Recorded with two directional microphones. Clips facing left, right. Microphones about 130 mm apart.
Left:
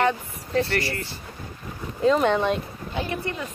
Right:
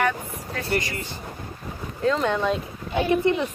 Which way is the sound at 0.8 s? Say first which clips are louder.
Left 3 dB; 15° right (ahead or behind).